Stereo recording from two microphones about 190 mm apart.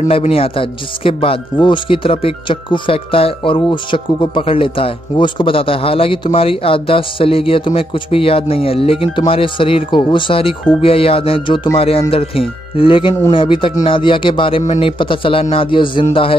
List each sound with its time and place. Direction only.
0.0 s speech: 35° left (ahead or behind)